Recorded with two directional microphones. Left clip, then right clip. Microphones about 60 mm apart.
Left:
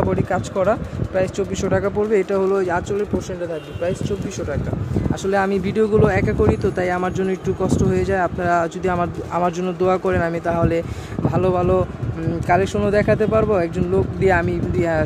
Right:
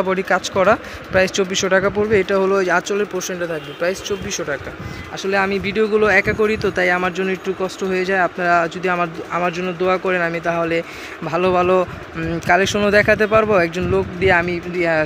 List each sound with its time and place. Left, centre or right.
0.1 s speech: centre
1.5 s speech: centre
2.4 s speech: centre
5.3 s speech: left
6.1 s speech: centre
6.7 s speech: left
7.1 s speech: left
8.1 s speech: left
8.5 s speech: left
9.8 s speech: left
11.3 s speech: left
11.6 s speech: centre
14.2 s speech: left